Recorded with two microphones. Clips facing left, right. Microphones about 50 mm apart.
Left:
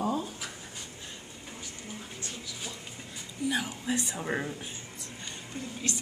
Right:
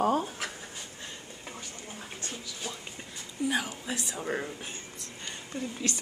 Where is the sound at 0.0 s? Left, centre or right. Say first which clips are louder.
Right 4 dB; right.